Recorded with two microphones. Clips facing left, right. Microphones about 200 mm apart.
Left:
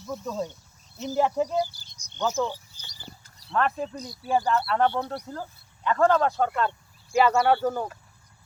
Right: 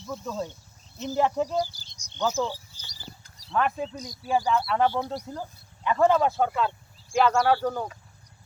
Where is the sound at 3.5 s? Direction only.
Centre (ahead or behind).